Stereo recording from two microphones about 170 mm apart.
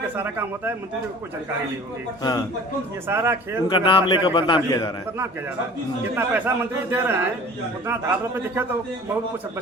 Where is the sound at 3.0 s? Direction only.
15° right (ahead or behind).